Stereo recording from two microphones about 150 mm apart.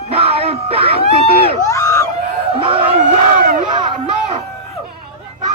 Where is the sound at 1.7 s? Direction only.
20° left (ahead or behind).